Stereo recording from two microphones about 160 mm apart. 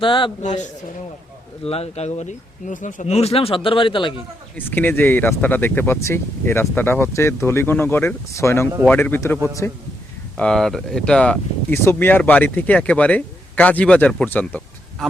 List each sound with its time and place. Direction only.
0.0 s speech: 30° left (ahead or behind)
0.4 s a man's voice: 50° left (ahead or behind); by 4.1 s 30° left (ahead or behind)
4.5 s speech: 10° left (ahead or behind)